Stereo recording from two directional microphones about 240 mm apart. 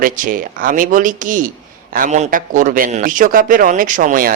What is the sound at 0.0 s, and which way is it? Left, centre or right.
Speech, right.